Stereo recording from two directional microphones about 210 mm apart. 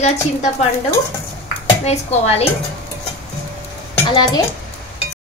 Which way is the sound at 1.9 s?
30° left (ahead or behind).